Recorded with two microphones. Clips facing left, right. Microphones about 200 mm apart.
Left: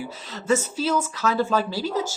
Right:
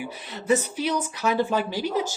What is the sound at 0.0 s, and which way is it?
Speech, 15° right (ahead or behind).